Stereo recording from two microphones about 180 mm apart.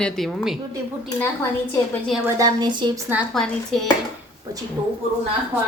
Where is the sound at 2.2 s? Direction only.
20° right (ahead or behind).